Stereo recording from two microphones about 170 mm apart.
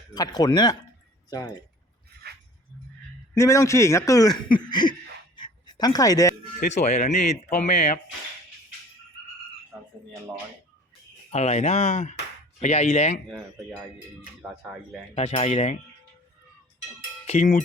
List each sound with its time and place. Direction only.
0.1 s speech: 25° left (ahead or behind)
3.3 s speech: 15° left (ahead or behind)
5.4 s a sound: 25° left (ahead or behind)
6.7 s speech: 40° left (ahead or behind)
9.7 s speech: 5° right (ahead or behind)
11.3 s speech: 40° left (ahead or behind)
15.1 s speech: 35° left (ahead or behind)
17.2 s speech: 40° left (ahead or behind)